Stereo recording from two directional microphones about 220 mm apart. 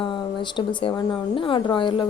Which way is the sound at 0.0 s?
20° left (ahead or behind).